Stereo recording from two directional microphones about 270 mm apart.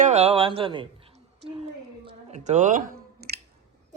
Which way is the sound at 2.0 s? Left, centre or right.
Right.